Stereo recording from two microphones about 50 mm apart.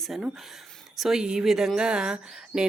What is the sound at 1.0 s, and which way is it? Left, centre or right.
Speech, centre.